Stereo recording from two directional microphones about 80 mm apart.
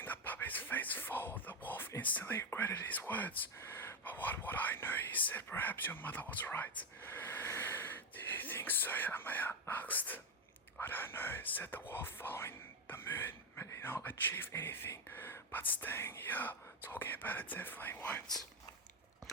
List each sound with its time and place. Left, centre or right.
0.0 s whispering: left
2.0 s speech: centre